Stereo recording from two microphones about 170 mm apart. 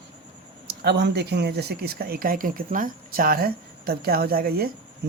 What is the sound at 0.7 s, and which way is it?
Speech, 75° right (ahead or behind).